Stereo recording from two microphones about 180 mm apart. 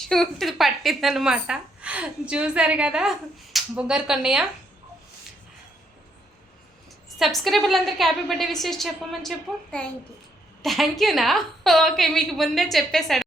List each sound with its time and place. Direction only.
0.0 s a woman's voice: centre (ahead or behind)
7.2 s a woman's voice: centre (ahead or behind)